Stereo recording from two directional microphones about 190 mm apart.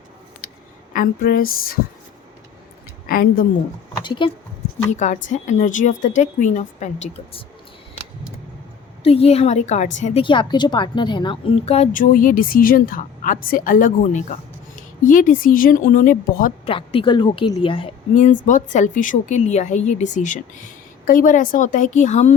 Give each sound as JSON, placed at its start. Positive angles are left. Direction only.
{"t": 0.4, "sound": "a sound", "side_deg": 50}
{"t": 0.9, "sound": "a woman's voice", "side_deg": 50}
{"t": 3.1, "sound": "a woman's voice", "side_deg": 50}
{"t": 4.0, "sound": "speech", "side_deg": 25}
{"t": 4.9, "sound": "a woman's voice", "side_deg": 40}
{"t": 9.0, "sound": "a woman's voice", "side_deg": 30}
{"t": 10.2, "sound": "a woman's voice", "side_deg": 25}
{"t": 12.1, "sound": "a woman's voice", "side_deg": 45}
{"t": 16.6, "sound": "a woman's voice", "side_deg": 30}
{"t": 18.1, "sound": "a woman's voice", "side_deg": 40}